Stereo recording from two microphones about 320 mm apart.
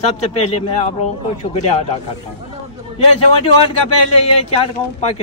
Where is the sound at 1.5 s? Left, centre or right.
Left.